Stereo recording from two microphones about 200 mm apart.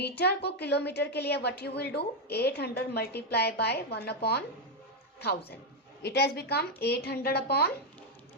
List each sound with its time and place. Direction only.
0.0 s a woman's voice: 55° left (ahead or behind)
6.0 s a woman's voice: 55° left (ahead or behind)